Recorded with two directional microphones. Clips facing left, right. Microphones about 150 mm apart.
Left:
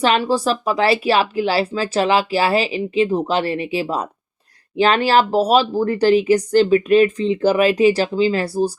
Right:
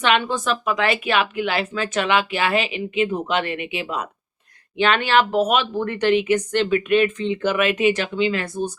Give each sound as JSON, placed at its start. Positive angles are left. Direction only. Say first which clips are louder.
{"t": 0.0, "sound": "speech", "louder": "left 4 dB", "side_deg": 35}